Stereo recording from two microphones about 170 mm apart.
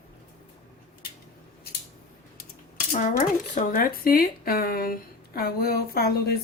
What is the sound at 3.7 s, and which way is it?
A woman's voice, 60° left (ahead or behind).